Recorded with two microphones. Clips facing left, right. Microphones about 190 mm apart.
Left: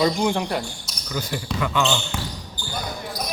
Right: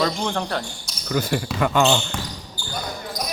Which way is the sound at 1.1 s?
55° right (ahead or behind).